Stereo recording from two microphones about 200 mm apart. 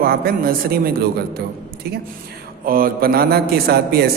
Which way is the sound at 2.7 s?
45° right (ahead or behind).